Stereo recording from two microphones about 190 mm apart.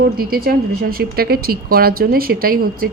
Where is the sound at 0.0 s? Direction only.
50° right (ahead or behind).